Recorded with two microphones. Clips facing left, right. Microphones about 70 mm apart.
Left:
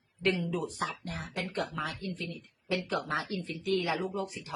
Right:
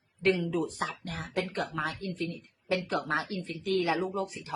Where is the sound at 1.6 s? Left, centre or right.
Right.